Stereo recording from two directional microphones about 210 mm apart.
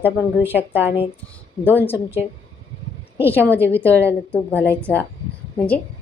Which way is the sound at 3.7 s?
5° left (ahead or behind).